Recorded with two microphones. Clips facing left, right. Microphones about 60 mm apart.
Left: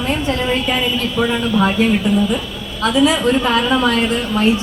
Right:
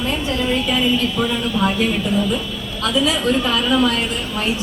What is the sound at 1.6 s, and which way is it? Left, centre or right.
Speech, centre.